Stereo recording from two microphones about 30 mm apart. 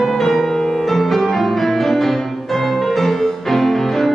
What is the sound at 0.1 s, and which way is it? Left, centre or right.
Music, centre.